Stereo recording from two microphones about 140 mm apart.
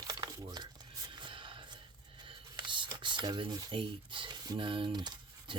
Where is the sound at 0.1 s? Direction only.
30° right (ahead or behind).